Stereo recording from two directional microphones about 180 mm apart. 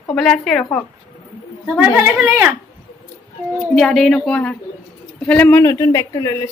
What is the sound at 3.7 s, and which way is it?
A woman's voice, centre (ahead or behind).